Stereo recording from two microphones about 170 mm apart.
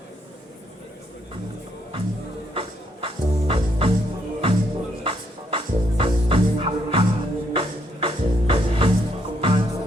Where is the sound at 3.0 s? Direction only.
30° right (ahead or behind).